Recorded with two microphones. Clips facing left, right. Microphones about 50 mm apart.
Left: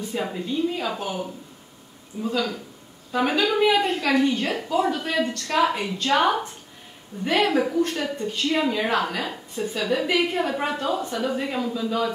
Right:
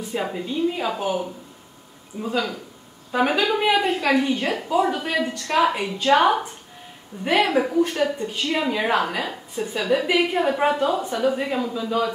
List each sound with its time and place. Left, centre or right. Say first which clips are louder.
0.1 s a woman's voice: right 2 dB; centre